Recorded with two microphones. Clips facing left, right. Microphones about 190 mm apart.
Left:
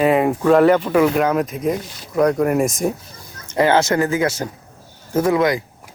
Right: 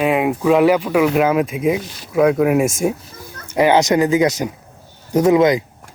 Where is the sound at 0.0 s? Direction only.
5° right (ahead or behind); by 5.6 s 20° right (ahead or behind).